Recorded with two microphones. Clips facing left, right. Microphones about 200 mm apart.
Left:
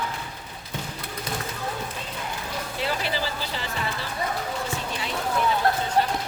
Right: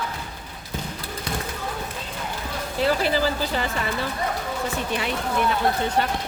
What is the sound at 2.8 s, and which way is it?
Speech, 45° right (ahead or behind).